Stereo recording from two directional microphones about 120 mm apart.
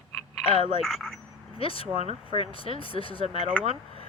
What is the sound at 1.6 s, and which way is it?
Speech, 50° left (ahead or behind).